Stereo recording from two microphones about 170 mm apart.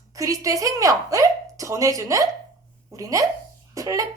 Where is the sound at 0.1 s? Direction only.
20° right (ahead or behind).